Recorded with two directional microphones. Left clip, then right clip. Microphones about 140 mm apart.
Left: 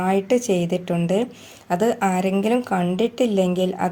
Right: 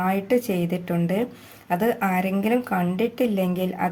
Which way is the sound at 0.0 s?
30° left (ahead or behind).